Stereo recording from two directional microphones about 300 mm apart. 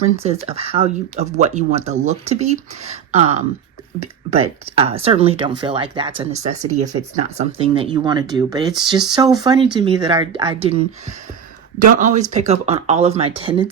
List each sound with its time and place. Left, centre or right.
0.2 s speech: centre
4.4 s speech: centre
11.9 s speech: right